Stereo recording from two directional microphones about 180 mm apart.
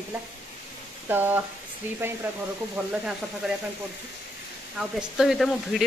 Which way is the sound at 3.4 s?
Centre (ahead or behind).